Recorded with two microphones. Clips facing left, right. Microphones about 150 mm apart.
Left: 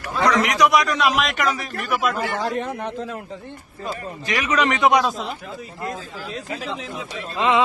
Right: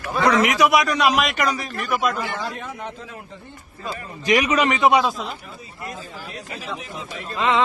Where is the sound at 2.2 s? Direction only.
45° left (ahead or behind).